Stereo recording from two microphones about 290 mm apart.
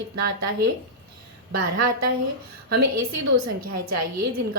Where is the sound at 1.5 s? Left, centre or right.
Right.